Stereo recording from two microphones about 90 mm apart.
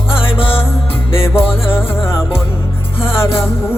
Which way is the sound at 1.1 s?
90° left.